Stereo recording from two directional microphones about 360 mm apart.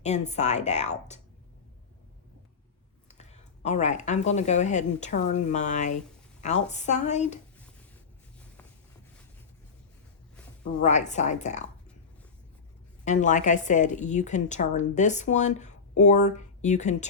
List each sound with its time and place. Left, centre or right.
0.0 s a woman's voice: centre
3.1 s a woman's voice: centre
10.6 s a woman's voice: centre
13.1 s a woman's voice: centre